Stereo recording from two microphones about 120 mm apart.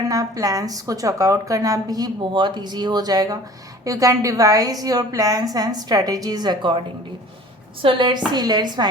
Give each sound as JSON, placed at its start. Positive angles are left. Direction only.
{"t": 0.1, "sound": "a woman's voice", "side_deg": -30}